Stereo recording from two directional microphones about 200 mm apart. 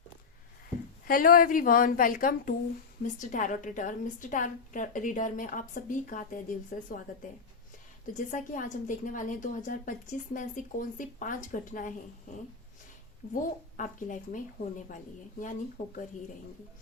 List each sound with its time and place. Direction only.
1.0 s a woman's voice: 45° left (ahead or behind)
8.0 s a woman's voice: 40° left (ahead or behind)
13.3 s a woman's voice: 40° left (ahead or behind)